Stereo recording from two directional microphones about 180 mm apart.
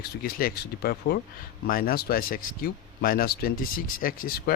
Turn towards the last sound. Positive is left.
turn(degrees=55)  # may be behind; listen again after turning